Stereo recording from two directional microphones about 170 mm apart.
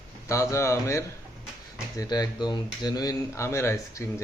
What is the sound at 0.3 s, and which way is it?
Speech, 15° left (ahead or behind).